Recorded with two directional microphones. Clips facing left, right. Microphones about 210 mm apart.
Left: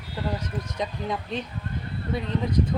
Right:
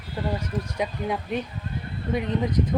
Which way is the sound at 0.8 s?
15° right (ahead or behind).